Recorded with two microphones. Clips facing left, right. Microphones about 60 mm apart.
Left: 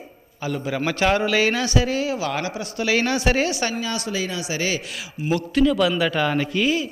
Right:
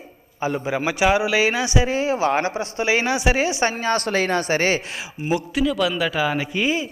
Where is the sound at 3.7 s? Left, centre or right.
Right.